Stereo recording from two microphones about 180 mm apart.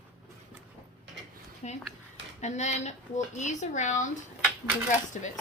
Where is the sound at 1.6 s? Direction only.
35° left (ahead or behind).